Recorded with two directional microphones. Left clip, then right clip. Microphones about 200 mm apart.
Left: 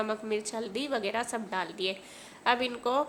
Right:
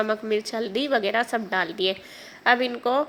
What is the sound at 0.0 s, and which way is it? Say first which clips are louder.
A woman's voice: right 7 dB; 15° right (ahead or behind).